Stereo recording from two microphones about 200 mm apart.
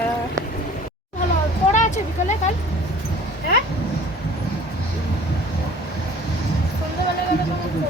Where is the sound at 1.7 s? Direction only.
35° left (ahead or behind).